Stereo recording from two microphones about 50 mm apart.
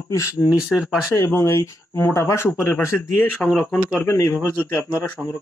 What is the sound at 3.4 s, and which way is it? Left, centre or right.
Speech, centre.